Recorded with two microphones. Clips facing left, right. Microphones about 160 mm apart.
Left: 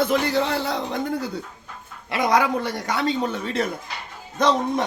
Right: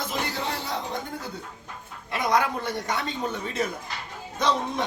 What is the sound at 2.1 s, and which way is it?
Speech, 90° left.